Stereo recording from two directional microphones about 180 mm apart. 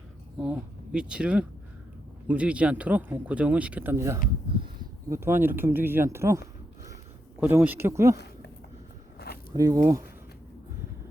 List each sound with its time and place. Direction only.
0.3 s speech: 5° right (ahead or behind)
8.1 s a sound: 65° left (ahead or behind)
9.5 s speech: 20° right (ahead or behind)